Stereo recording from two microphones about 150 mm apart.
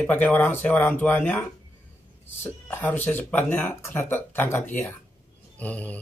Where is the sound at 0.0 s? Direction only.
10° left (ahead or behind).